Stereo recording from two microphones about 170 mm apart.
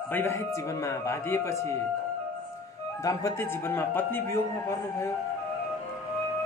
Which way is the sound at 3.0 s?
20° left (ahead or behind).